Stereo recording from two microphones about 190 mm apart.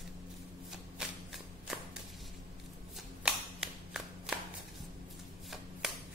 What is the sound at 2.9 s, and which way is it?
Shuffling cards, 5° right (ahead or behind).